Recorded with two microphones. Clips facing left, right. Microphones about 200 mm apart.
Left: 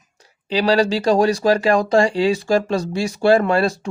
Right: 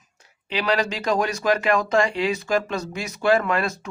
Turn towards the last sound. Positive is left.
turn(degrees=30)  # may be behind; listen again after turning